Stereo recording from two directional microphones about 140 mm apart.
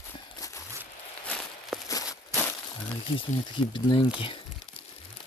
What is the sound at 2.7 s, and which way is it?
Speech, 40° left (ahead or behind).